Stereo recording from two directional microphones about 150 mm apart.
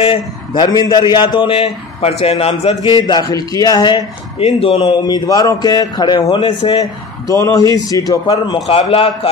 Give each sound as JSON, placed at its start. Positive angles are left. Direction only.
{"t": 0.0, "sound": "a man's voice", "side_deg": 35}
{"t": 4.4, "sound": "a man's voice", "side_deg": 40}
{"t": 8.6, "sound": "a man's voice", "side_deg": 40}